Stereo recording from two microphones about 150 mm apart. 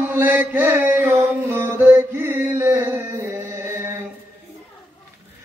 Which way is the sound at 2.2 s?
15° right (ahead or behind).